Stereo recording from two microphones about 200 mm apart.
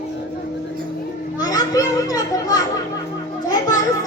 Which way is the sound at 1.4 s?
20° left (ahead or behind).